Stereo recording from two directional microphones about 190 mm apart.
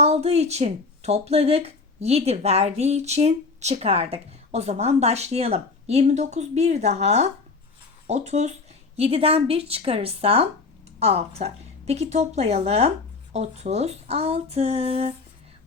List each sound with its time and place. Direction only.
0.0 s speech: 35° right (ahead or behind)